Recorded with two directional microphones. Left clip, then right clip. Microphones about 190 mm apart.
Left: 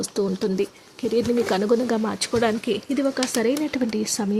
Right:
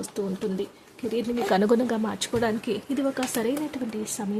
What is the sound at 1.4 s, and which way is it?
Speech, 5° right (ahead or behind).